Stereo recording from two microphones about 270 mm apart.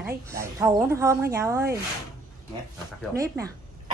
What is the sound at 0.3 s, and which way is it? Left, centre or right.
Speech, centre.